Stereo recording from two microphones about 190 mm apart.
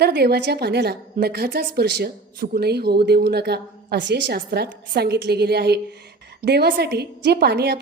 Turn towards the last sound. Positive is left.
turn(degrees=-55)  # may be behind; listen again after turning